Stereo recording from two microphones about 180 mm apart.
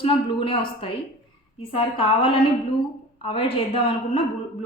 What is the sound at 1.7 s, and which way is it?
A woman's voice, 30° left (ahead or behind).